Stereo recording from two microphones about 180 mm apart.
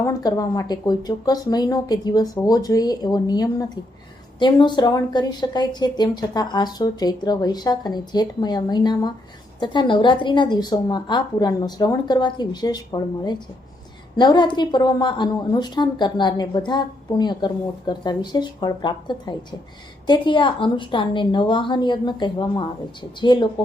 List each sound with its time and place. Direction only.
0.0 s a woman's voice: 20° left (ahead or behind)